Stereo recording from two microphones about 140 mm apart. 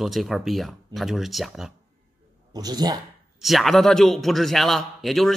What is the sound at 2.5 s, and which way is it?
Speech, 30° right (ahead or behind).